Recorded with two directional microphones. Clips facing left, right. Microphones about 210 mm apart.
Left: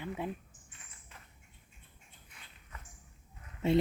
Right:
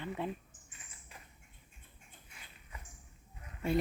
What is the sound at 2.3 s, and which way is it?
Walk, 10° right (ahead or behind).